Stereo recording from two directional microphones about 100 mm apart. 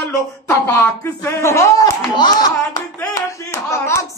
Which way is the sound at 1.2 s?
30° left (ahead or behind).